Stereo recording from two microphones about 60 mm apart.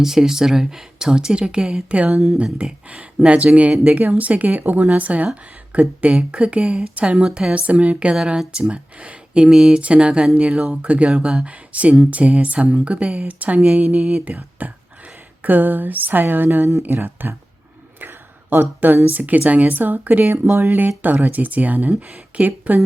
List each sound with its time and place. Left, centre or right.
0.0 s speech: centre
14.0 s speech: centre
14.3 s speech: right
15.4 s a sound: right
18.5 s a sound: right
19.0 s speech: right
20.5 s speech: right
21.0 s speech: right